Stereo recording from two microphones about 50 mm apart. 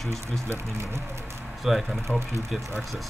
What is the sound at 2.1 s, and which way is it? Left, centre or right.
Speech, left.